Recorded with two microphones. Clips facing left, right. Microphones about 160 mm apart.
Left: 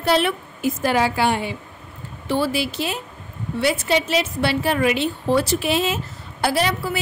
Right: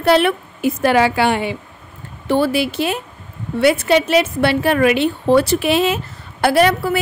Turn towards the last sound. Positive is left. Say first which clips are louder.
# right 7 dB
turn(degrees=-60)  # may be behind; listen again after turning